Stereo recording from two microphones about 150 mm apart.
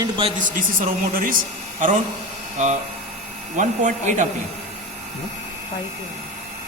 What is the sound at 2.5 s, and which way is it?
Speech, 50° right (ahead or behind).